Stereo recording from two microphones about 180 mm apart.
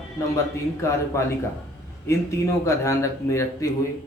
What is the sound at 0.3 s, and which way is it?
Speech, 15° left (ahead or behind).